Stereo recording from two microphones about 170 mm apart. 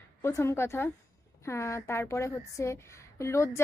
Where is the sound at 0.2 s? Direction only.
15° left (ahead or behind).